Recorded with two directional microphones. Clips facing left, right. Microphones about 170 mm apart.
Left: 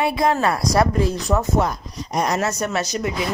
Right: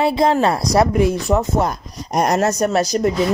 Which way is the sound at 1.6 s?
45° right (ahead or behind).